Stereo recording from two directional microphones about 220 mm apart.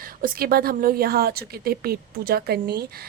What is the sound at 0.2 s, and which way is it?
A woman's voice, 40° right (ahead or behind).